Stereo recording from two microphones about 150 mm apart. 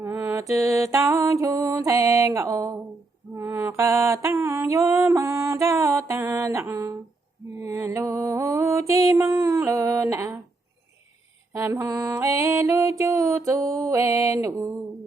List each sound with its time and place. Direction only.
0.0 s mantra: 15° right (ahead or behind)
0.5 s music: 20° right (ahead or behind)
7.6 s mantra: 20° right (ahead or behind)
11.5 s mantra: 20° right (ahead or behind)
13.0 s a sound: 20° right (ahead or behind)
13.9 s mantra: 20° right (ahead or behind)